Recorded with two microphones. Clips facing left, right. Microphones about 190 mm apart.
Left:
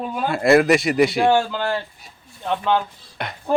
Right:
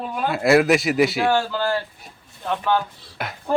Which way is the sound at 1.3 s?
15° left (ahead or behind).